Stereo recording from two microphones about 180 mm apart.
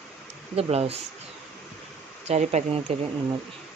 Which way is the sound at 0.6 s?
35° right (ahead or behind).